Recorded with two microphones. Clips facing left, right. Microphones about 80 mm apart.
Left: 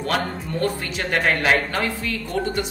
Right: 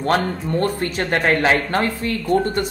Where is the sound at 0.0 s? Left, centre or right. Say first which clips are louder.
Right 5 dB; right.